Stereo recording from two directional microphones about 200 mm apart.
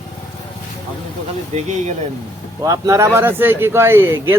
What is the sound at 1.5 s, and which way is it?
Speech, 35° right (ahead or behind).